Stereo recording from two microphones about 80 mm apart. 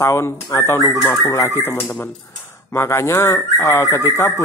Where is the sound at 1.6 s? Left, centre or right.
Left.